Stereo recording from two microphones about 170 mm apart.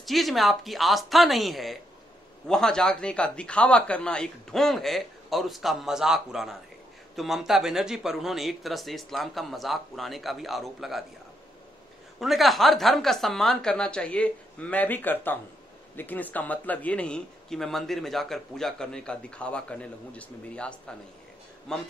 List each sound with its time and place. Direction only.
0.0 s speech: centre (ahead or behind)
12.2 s speech: centre (ahead or behind)